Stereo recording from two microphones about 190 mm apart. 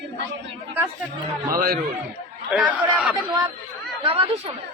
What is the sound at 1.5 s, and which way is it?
Speech, 50° right (ahead or behind).